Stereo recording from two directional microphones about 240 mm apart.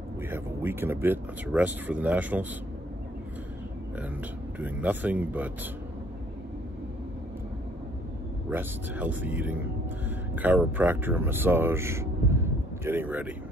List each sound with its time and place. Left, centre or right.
0.3 s speech: centre
4.6 s speech: centre
8.5 s speech: centre